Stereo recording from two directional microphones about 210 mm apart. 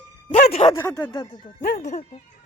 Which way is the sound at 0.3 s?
30° left (ahead or behind).